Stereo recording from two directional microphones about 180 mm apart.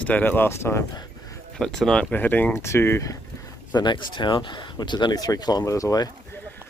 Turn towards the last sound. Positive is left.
turn(degrees=20)  # may be behind; listen again after turning